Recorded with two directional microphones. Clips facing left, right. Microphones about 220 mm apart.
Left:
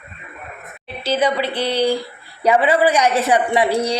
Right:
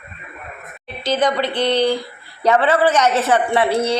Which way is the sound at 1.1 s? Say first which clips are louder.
Even; 5° left (ahead or behind).